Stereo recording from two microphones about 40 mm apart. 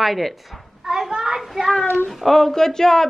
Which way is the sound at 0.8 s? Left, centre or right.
Centre.